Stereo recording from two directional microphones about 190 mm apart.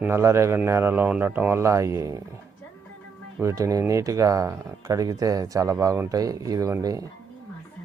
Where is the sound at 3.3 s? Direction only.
15° right (ahead or behind).